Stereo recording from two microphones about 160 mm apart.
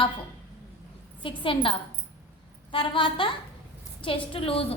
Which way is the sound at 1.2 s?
30° left (ahead or behind).